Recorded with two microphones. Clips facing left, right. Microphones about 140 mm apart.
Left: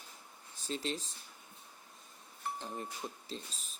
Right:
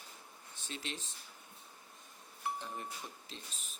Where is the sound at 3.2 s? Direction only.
35° left (ahead or behind).